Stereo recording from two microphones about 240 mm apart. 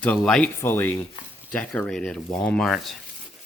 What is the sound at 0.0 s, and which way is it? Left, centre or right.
Speech, centre.